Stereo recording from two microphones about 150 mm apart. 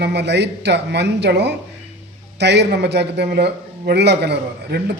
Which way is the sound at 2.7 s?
90° right.